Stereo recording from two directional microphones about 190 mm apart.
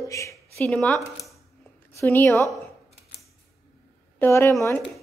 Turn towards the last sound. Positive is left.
turn(degrees=15)  # may be behind; listen again after turning